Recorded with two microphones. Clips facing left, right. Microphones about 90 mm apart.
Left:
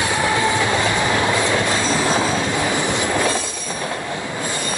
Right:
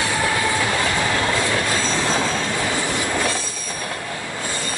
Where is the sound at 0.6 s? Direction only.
20° left (ahead or behind).